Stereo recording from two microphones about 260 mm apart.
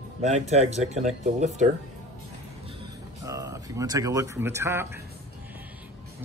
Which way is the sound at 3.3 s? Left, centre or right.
Centre.